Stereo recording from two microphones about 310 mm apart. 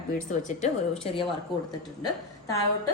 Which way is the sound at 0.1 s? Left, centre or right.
Left.